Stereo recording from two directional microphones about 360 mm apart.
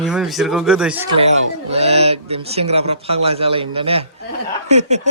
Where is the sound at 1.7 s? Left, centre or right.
Centre.